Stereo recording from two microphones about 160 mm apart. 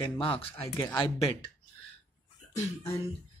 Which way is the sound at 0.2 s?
35° left (ahead or behind).